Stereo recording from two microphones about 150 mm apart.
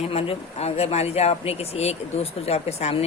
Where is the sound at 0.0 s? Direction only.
40° left (ahead or behind).